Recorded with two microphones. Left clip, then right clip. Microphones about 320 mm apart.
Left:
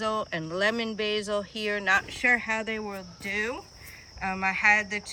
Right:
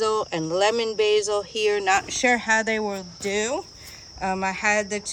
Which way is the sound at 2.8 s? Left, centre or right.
Centre.